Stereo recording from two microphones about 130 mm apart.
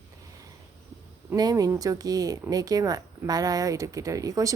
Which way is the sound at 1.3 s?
30° right (ahead or behind).